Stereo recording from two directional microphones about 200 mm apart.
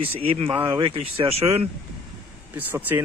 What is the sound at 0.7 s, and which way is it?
Speech, 30° right (ahead or behind).